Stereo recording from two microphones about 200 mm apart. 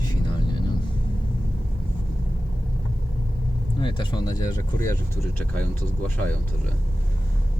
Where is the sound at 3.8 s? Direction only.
25° left (ahead or behind).